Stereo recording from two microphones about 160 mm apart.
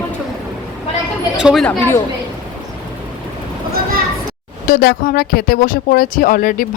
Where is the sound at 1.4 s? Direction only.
5° right (ahead or behind).